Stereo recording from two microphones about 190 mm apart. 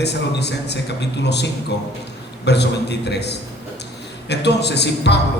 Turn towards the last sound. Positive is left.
turn(degrees=60)  # may be behind; listen again after turning